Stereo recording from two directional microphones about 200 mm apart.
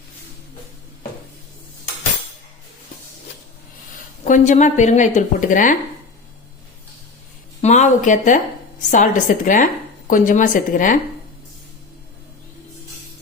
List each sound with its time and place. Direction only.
4.2 s a woman's voice: 40° left (ahead or behind)
7.6 s a woman's voice: 35° left (ahead or behind)